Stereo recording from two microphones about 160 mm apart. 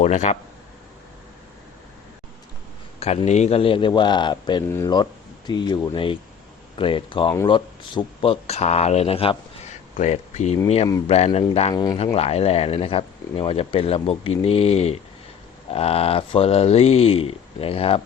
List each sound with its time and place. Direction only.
0.0 s speech: 45° left (ahead or behind)
3.0 s speech: 40° left (ahead or behind)
10.0 s speech: 45° left (ahead or behind)
11.7 s speech: 25° left (ahead or behind)
12.1 s speech: 40° left (ahead or behind)